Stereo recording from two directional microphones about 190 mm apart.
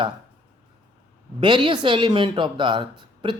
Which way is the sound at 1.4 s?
25° right (ahead or behind).